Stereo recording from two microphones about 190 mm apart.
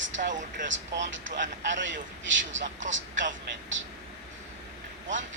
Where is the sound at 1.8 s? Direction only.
75° right (ahead or behind).